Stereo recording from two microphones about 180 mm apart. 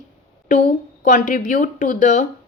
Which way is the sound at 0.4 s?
45° left (ahead or behind).